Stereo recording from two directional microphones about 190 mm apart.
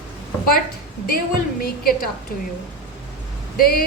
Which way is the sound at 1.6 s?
50° left (ahead or behind).